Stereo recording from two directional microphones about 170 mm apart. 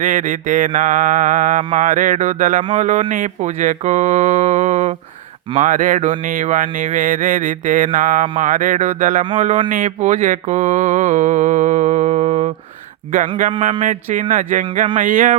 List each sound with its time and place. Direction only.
0.0 s mantra: 50° right (ahead or behind)
13.8 s mantra: 50° right (ahead or behind)